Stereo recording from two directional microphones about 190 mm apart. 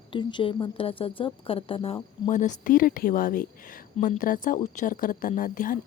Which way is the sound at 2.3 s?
40° left (ahead or behind).